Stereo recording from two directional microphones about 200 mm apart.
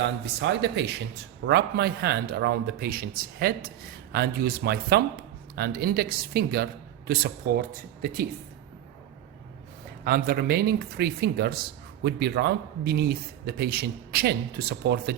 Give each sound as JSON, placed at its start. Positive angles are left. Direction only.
{"t": 0.0, "sound": "speech", "side_deg": -60}
{"t": 7.7, "sound": "speech", "side_deg": -45}
{"t": 10.0, "sound": "speech", "side_deg": -50}